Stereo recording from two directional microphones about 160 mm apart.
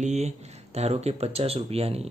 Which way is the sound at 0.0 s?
45° right (ahead or behind).